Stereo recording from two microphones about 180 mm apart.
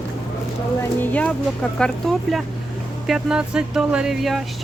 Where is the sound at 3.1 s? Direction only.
5° right (ahead or behind).